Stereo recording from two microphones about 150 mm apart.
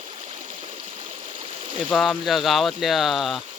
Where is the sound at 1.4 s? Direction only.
40° right (ahead or behind).